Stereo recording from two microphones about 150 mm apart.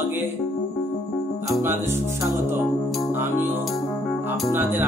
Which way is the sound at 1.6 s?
15° right (ahead or behind).